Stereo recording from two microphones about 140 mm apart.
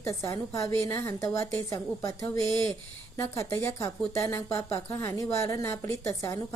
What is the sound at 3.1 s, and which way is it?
A woman's voice, 20° left (ahead or behind).